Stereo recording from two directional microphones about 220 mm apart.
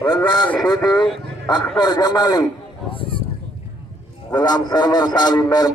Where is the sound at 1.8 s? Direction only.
20° left (ahead or behind).